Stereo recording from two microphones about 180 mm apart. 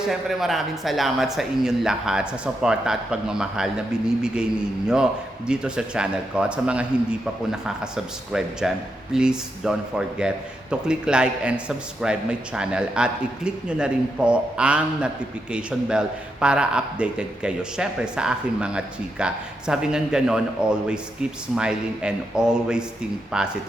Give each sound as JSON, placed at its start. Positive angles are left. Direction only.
{"t": 0.1, "sound": "a man's voice", "side_deg": 0}
{"t": 5.5, "sound": "a man's voice", "side_deg": -5}